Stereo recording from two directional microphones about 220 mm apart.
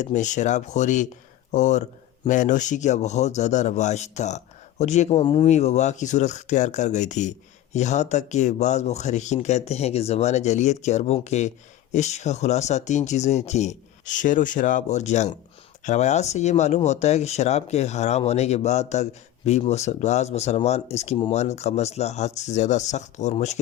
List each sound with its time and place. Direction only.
0.0 s speech: 35° left (ahead or behind)